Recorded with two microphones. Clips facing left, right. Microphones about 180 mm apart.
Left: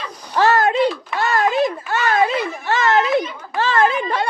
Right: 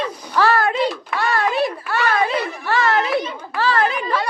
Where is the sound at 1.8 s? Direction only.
45° left (ahead or behind).